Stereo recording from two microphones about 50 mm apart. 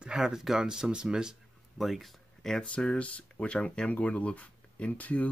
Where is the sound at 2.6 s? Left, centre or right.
Left.